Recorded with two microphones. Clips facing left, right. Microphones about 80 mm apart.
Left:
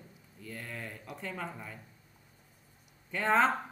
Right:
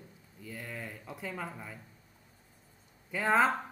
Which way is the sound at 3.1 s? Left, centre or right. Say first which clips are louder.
Even; centre.